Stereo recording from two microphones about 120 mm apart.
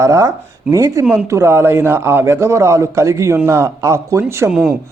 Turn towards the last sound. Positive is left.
turn(degrees=-5)  # may be behind; listen again after turning